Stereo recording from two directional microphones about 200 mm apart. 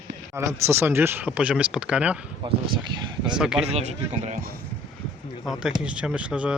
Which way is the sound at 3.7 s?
35° right (ahead or behind).